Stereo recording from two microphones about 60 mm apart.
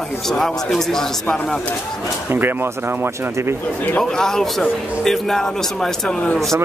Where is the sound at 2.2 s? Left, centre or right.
Right.